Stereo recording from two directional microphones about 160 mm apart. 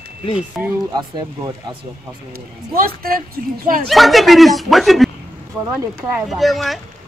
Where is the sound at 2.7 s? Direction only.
70° right (ahead or behind).